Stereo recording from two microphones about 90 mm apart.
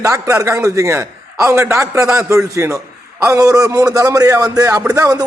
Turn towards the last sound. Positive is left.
turn(degrees=-40)  # may be behind; listen again after turning